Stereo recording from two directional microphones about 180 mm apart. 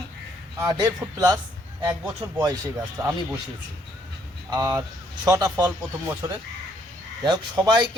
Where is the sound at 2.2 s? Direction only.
25° right (ahead or behind).